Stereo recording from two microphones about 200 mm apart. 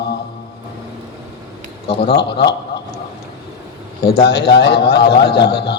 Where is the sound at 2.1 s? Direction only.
55° left (ahead or behind).